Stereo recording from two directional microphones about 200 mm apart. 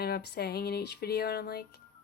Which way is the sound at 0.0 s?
55° left (ahead or behind).